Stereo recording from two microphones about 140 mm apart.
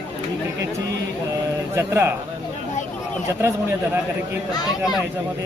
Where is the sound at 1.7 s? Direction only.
20° right (ahead or behind).